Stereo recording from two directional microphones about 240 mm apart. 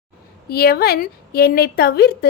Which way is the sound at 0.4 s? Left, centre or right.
Left.